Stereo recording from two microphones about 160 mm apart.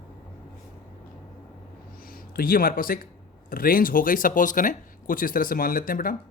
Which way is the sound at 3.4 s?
65° left (ahead or behind).